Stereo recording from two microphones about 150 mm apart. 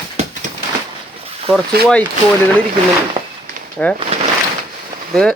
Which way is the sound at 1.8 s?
90° right.